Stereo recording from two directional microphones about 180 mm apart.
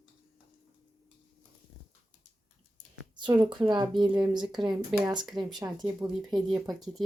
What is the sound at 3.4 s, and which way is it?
Speech, 25° right (ahead or behind).